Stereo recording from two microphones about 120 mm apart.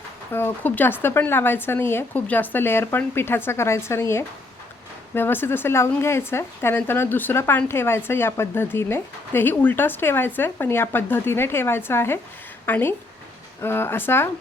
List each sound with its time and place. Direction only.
0.3 s speech: 15° left (ahead or behind)